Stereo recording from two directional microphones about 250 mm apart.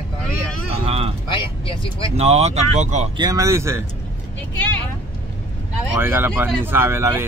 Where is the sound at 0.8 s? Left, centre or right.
Right.